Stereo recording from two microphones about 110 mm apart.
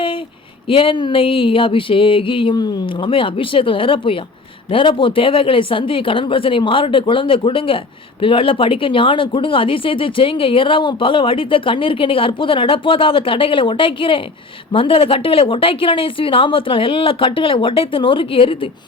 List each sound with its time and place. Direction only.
0.7 s speech: 50° left (ahead or behind)